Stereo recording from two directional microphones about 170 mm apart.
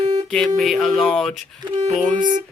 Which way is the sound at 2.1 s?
50° right (ahead or behind).